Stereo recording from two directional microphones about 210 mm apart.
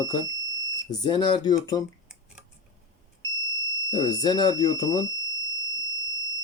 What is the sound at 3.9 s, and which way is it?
Speech, 20° left (ahead or behind).